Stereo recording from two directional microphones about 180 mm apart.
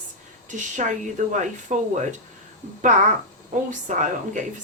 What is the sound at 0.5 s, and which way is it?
Speech, 40° right (ahead or behind).